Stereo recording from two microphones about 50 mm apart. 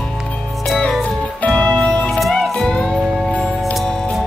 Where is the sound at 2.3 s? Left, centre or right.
Centre.